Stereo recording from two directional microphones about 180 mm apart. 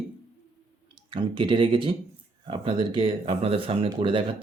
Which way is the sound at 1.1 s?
25° right (ahead or behind).